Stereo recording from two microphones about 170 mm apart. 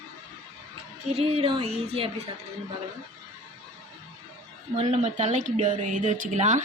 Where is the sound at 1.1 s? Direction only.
35° right (ahead or behind).